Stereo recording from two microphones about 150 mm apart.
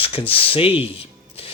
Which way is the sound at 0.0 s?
40° left (ahead or behind).